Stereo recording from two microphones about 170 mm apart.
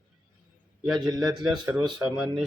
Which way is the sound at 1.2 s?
Centre (ahead or behind).